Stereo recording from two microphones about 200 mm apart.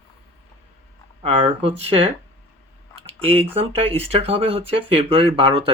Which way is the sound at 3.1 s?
30° right (ahead or behind).